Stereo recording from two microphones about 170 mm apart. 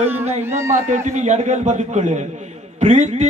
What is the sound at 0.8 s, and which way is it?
Music, 45° right (ahead or behind).